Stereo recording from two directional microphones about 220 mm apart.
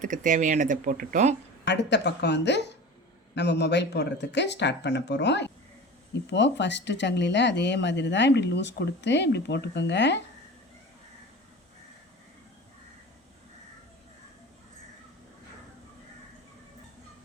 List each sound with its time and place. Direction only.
0.0 s speech: 35° right (ahead or behind)
1.6 s speech: 50° left (ahead or behind)